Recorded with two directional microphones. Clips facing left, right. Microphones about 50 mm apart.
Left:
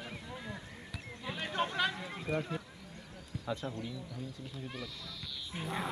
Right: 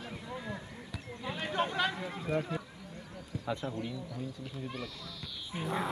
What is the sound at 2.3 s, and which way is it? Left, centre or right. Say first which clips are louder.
Speech: right 2 dB; centre.